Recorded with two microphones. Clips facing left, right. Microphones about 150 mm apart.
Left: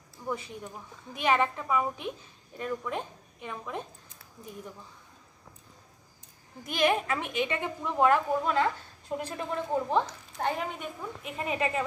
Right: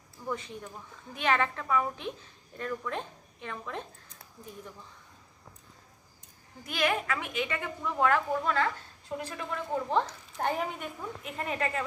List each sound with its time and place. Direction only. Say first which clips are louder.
0.2 s a woman's voice: left 1 dB; 10° left (ahead or behind)
6.7 s a woman's voice: left 3 dB; 25° left (ahead or behind)
10.3 s a woman's voice: even; 5° right (ahead or behind); by 11.8 s 10° left (ahead or behind)